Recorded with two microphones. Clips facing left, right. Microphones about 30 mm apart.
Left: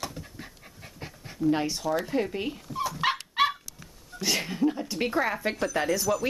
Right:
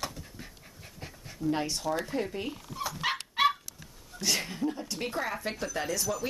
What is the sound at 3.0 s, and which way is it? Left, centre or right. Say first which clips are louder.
Dog: left 4 dB; centre.